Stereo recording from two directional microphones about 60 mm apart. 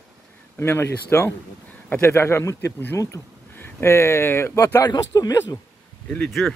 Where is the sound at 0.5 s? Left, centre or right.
Left.